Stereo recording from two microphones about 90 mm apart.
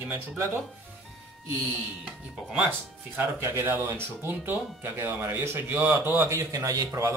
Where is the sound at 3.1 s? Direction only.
30° right (ahead or behind).